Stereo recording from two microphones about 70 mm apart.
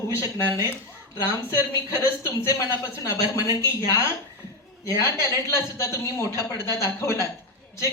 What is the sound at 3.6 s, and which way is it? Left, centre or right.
A woman's voice, left.